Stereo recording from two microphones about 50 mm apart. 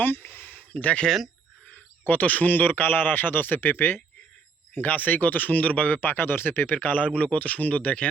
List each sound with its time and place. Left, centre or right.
0.0 s speech: left
1.0 s speech: centre
1.6 s a man's voice: left
6.0 s a man's voice: left